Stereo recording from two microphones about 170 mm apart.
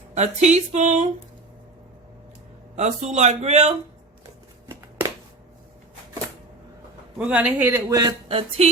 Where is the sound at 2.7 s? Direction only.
40° right (ahead or behind).